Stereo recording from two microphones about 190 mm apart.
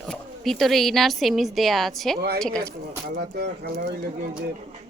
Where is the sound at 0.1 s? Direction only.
Centre (ahead or behind).